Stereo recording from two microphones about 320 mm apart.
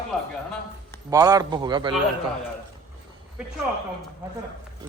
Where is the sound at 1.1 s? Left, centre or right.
Centre.